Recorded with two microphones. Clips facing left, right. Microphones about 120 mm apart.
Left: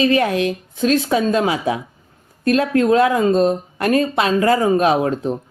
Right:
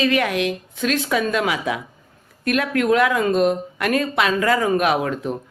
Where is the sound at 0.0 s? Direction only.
30° left (ahead or behind).